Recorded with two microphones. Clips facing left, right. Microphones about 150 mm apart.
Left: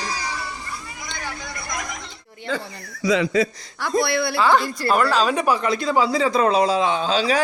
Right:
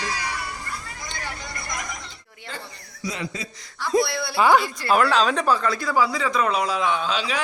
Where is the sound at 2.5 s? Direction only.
90° left.